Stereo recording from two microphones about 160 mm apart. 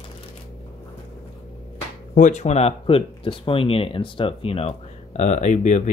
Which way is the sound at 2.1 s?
50° left (ahead or behind).